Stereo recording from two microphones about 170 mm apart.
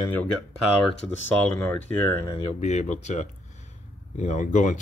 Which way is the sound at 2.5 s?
40° left (ahead or behind).